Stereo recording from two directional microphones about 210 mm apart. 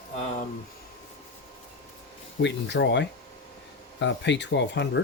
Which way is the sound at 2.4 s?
55° left (ahead or behind).